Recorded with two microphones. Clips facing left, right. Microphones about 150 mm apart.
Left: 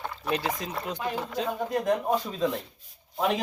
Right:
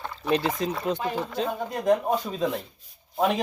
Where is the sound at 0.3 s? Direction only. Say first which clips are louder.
Right 5 dB; 25° right (ahead or behind).